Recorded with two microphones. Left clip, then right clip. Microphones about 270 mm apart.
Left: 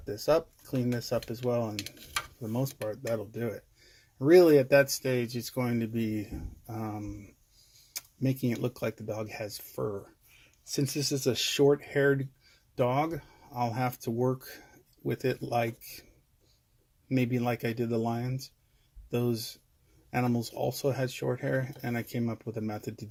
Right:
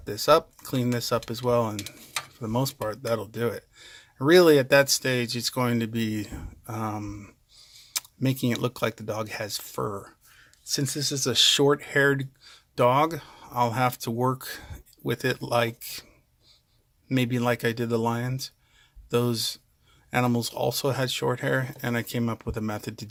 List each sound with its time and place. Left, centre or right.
0.0 s speech: centre
17.1 s speech: centre